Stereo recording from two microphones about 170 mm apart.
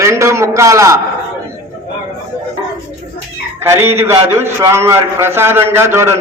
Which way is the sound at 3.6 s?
15° right (ahead or behind).